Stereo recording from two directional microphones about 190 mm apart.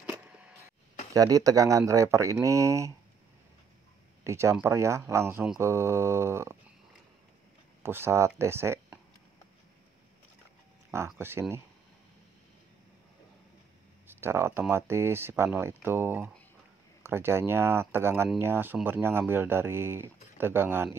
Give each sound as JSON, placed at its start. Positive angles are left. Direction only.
{"t": 0.1, "sound": "a sound", "side_deg": -10}
{"t": 1.1, "sound": "speech", "side_deg": -20}
{"t": 4.2, "sound": "speech", "side_deg": -15}
{"t": 7.8, "sound": "speech", "side_deg": -10}
{"t": 11.1, "sound": "speech", "side_deg": -10}
{"t": 14.0, "sound": "speech", "side_deg": -10}